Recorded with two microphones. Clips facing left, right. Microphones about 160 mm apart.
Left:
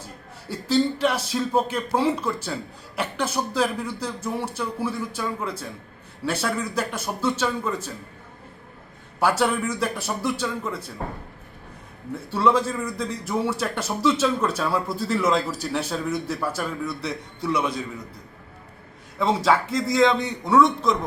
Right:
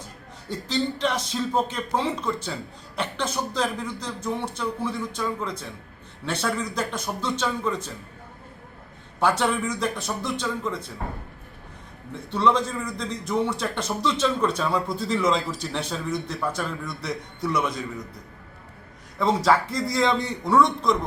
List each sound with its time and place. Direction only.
0.4 s a man's voice: 5° left (ahead or behind)
9.2 s a man's voice: 5° left (ahead or behind)
12.3 s a man's voice: 5° left (ahead or behind)
17.1 s a man's voice: 30° left (ahead or behind)
19.7 s a man's voice: centre (ahead or behind)